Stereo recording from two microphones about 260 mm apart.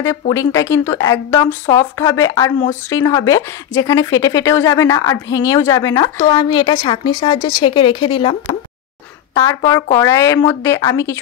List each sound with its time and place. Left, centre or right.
0.3 s a woman's voice: centre